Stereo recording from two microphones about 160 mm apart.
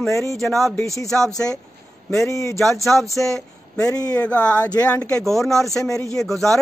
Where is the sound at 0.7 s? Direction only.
20° left (ahead or behind).